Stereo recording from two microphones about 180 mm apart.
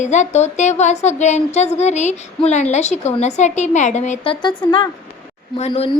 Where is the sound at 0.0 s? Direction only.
40° left (ahead or behind).